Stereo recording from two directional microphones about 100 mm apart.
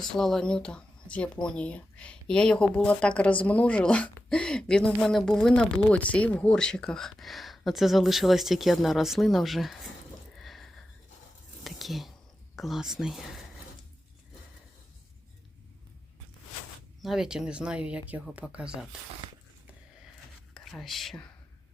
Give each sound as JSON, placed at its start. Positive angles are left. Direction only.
{"t": 0.1, "sound": "speech", "side_deg": 5}
{"t": 10.3, "sound": "sniff", "side_deg": 0}
{"t": 11.6, "sound": "whispering", "side_deg": 0}
{"t": 12.5, "sound": "speech", "side_deg": 0}
{"t": 17.0, "sound": "speech", "side_deg": -5}
{"t": 20.5, "sound": "speech", "side_deg": 0}